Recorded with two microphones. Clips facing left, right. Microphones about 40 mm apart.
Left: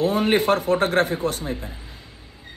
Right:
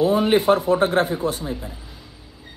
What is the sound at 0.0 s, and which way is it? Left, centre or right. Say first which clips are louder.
Speech: right 2 dB; left.